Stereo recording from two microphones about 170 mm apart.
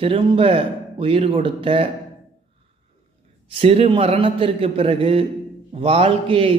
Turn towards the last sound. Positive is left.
turn(degrees=-35)  # may be behind; listen again after turning